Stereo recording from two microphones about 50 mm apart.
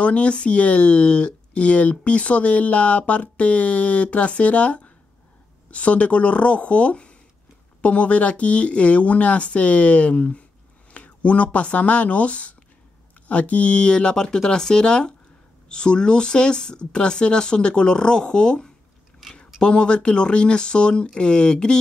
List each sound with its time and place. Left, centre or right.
0.0 s speech: left